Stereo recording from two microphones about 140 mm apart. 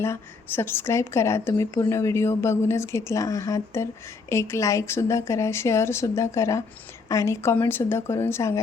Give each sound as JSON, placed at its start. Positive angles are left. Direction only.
{"t": 0.0, "sound": "a woman's voice", "side_deg": 15}